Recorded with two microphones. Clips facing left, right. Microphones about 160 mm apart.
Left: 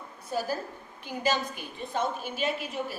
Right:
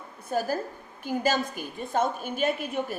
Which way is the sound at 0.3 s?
50° right (ahead or behind).